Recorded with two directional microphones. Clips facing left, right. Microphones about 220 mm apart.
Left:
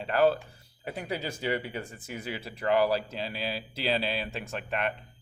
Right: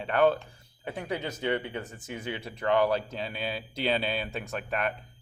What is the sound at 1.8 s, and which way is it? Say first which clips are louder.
Speech: right 1 dB; 10° left (ahead or behind).